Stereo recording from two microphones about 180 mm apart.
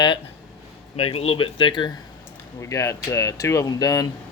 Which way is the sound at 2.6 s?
15° left (ahead or behind).